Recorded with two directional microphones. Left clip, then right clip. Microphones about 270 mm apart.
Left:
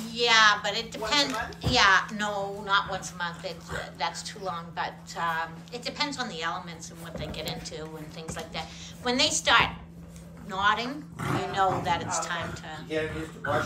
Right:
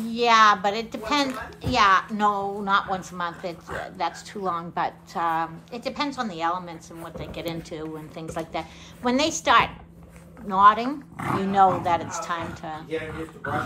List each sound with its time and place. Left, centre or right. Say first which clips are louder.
0.1 s a woman's voice: right 3 dB; centre